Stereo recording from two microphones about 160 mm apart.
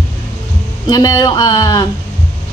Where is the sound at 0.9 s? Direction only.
25° left (ahead or behind).